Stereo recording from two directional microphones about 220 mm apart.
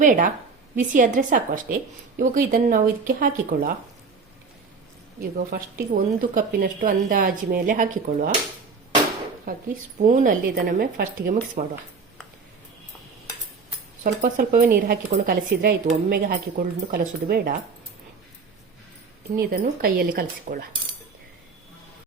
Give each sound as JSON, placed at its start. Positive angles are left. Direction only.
{"t": 0.0, "sound": "speech", "side_deg": -35}
{"t": 5.2, "sound": "speech", "side_deg": -40}
{"t": 10.0, "sound": "speech", "side_deg": -35}
{"t": 14.0, "sound": "speech", "side_deg": -40}
{"t": 19.4, "sound": "speech", "side_deg": -40}